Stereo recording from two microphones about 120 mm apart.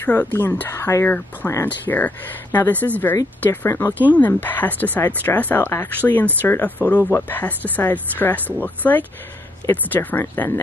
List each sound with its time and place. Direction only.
0.0 s speech: 15° left (ahead or behind)
1.0 s speech: 15° left (ahead or behind)